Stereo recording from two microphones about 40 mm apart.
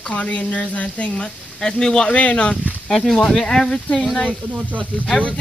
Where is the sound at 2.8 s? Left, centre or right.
Centre.